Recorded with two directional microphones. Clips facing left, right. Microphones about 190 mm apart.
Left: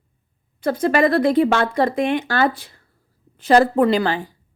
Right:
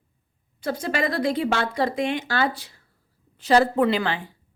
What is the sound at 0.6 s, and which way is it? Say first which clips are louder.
A woman's voice: left 8 dB; 55° left (ahead or behind).